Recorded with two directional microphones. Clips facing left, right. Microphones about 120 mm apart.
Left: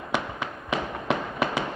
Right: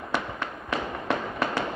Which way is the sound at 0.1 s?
90° left.